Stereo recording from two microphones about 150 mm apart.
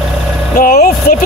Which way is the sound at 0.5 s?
75° left (ahead or behind).